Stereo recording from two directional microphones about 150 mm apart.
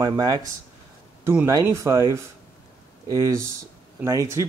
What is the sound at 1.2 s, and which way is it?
Speech, 10° right (ahead or behind).